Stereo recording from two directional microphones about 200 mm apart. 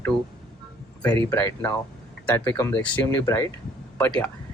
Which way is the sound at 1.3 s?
15° left (ahead or behind).